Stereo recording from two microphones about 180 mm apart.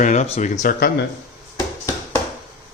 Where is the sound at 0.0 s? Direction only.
40° left (ahead or behind).